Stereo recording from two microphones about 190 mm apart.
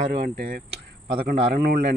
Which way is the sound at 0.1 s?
55° right (ahead or behind).